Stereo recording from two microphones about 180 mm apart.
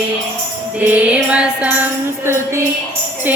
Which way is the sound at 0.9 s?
5° right (ahead or behind).